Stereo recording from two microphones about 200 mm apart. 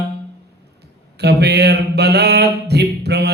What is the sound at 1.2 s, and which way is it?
Mantra, 55° right (ahead or behind).